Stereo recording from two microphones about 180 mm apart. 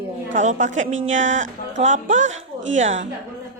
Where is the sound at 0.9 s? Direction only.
90° right.